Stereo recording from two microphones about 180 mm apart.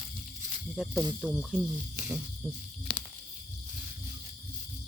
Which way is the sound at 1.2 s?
Centre (ahead or behind).